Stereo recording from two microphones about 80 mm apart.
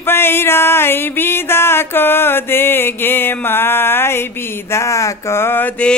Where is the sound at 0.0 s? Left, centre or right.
Left.